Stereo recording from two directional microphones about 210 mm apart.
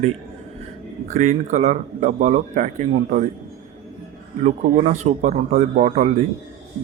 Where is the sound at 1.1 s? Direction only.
35° right (ahead or behind).